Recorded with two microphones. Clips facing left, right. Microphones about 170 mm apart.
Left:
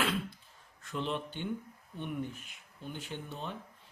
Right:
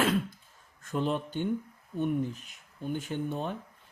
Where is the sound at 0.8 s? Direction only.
45° right (ahead or behind).